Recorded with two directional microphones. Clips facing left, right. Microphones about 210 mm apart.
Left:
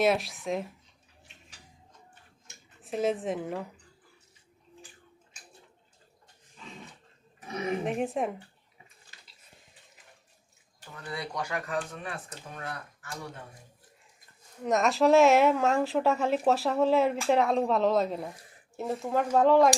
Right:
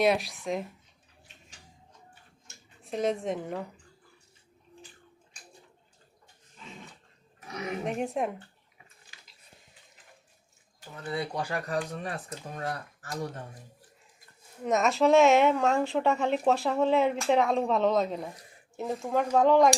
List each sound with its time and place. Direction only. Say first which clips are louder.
0.0 s speech: even; centre (ahead or behind)
2.8 s speech: even; 5° left (ahead or behind)
7.9 s speech: left 1 dB; centre (ahead or behind)
10.9 s speech: right 3 dB; 25° right (ahead or behind); by 13.4 s 40° right (ahead or behind)
14.6 s speech: even; centre (ahead or behind)